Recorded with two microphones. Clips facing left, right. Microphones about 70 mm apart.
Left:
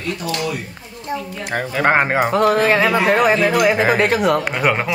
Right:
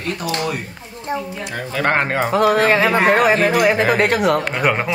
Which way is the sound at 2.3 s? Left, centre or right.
Centre.